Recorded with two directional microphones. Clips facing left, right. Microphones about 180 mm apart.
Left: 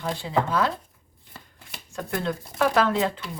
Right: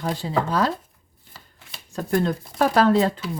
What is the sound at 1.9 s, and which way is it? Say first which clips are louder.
Speech: right 6 dB; 40° right (ahead or behind).